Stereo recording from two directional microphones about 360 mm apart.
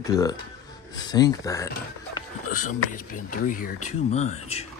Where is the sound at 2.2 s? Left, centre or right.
Left.